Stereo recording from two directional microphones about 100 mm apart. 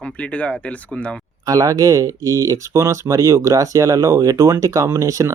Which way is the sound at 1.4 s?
35° right (ahead or behind).